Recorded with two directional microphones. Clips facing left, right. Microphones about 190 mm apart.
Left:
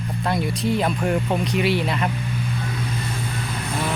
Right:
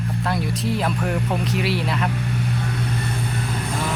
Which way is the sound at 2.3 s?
65° right (ahead or behind).